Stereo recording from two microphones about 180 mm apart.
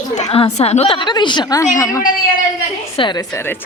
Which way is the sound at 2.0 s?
50° left (ahead or behind).